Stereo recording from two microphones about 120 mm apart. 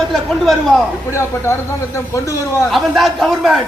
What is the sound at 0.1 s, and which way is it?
Speech, centre (ahead or behind).